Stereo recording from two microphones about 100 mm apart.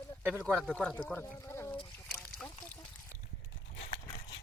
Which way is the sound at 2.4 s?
10° left (ahead or behind).